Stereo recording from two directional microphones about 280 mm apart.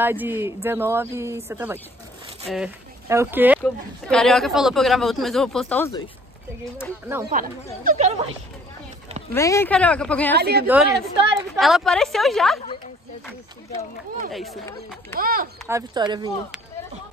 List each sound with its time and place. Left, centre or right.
0.0 s speech: centre
7.2 s speech: right
9.3 s speech: centre
10.3 s speech: right
10.7 s speech: centre
14.3 s speech: centre
15.1 s speech: right
15.7 s speech: centre